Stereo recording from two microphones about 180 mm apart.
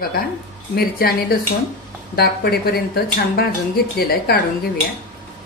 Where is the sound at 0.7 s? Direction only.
55° left (ahead or behind).